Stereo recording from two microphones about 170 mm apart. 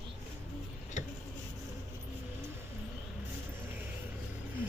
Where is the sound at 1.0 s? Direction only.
45° left (ahead or behind).